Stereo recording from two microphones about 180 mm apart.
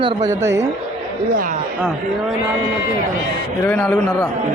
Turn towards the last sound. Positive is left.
turn(degrees=5)  # may be behind; listen again after turning